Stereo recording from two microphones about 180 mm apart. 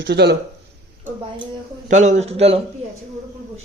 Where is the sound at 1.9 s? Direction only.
40° right (ahead or behind).